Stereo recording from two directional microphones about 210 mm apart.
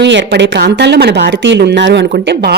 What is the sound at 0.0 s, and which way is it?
Speech, 55° right (ahead or behind).